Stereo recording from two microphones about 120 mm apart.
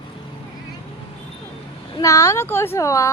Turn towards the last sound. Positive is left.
turn(degrees=25)  # may be behind; listen again after turning